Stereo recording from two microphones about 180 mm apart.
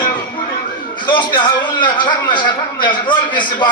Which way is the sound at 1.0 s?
25° left (ahead or behind).